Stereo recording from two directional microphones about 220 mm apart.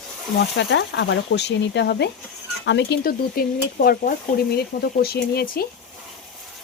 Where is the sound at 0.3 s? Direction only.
55° left (ahead or behind).